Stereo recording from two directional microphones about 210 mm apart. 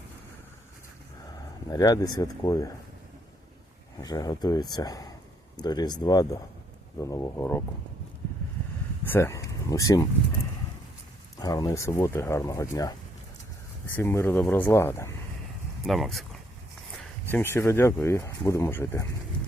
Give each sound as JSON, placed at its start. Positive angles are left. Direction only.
{"t": 1.7, "sound": "speech", "side_deg": 15}
{"t": 4.0, "sound": "speech", "side_deg": 15}
{"t": 9.0, "sound": "speech", "side_deg": 10}
{"t": 11.3, "sound": "speech", "side_deg": 15}
{"t": 15.8, "sound": "speech", "side_deg": 0}
{"t": 17.3, "sound": "speech", "side_deg": 10}